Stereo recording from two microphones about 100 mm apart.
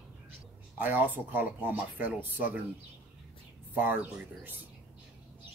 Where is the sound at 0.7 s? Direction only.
20° right (ahead or behind).